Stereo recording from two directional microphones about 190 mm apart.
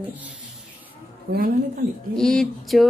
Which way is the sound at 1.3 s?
50° right (ahead or behind).